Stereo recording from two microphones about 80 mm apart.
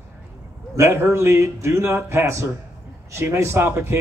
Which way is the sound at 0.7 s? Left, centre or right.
Right.